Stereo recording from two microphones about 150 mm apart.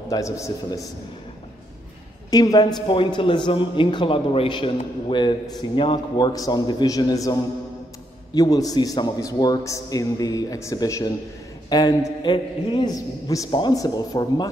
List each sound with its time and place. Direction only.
0.1 s a man's voice: 20° left (ahead or behind)
2.3 s a man's voice: 25° left (ahead or behind)
8.4 s a man's voice: 25° left (ahead or behind)